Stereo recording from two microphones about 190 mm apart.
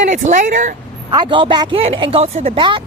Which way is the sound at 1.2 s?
25° right (ahead or behind).